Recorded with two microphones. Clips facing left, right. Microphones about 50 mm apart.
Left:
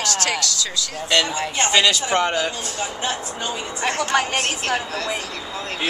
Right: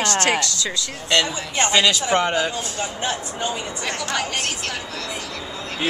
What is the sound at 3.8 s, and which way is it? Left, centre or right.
Speech, left.